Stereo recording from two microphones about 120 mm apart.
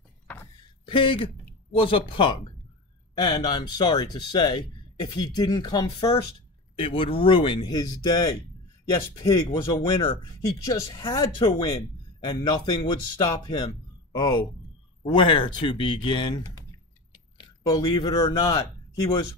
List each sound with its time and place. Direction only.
0.8 s speech: 45° left (ahead or behind)
6.8 s speech: 45° left (ahead or behind)
17.1 s a sound: 35° left (ahead or behind)